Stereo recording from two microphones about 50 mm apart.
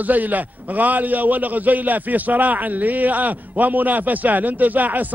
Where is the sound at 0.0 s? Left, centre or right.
Right.